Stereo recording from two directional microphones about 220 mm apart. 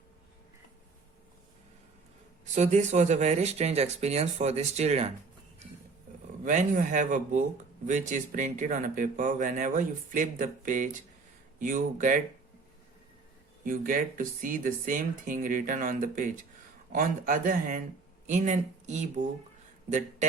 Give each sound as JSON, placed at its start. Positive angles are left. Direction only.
{"t": 2.4, "sound": "speech", "side_deg": -30}
{"t": 6.4, "sound": "speech", "side_deg": -35}
{"t": 13.7, "sound": "speech", "side_deg": -40}